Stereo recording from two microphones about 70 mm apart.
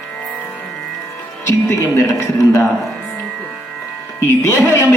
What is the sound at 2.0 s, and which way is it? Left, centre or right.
Speech, left.